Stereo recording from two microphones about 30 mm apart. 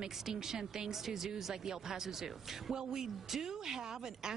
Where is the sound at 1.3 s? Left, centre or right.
Right.